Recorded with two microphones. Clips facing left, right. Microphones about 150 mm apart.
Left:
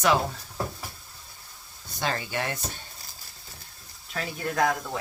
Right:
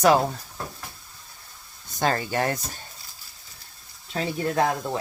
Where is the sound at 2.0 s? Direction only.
45° right (ahead or behind).